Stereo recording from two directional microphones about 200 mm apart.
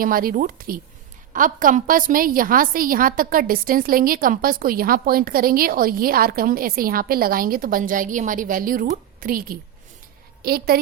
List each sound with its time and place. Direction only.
0.0 s a woman's voice: 45° right (ahead or behind)